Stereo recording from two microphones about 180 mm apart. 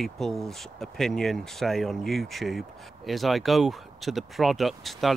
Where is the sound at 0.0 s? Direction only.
Centre (ahead or behind).